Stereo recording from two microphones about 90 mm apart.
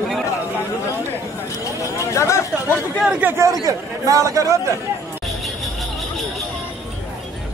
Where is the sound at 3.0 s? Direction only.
15° right (ahead or behind).